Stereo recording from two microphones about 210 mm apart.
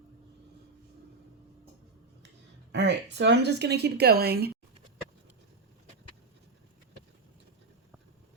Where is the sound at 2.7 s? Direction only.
55° right (ahead or behind).